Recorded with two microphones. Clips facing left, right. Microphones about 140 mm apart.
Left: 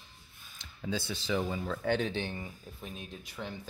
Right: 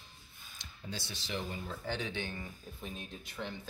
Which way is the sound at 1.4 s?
90° left.